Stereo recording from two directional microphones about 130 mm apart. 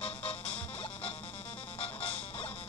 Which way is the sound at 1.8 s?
45° left (ahead or behind).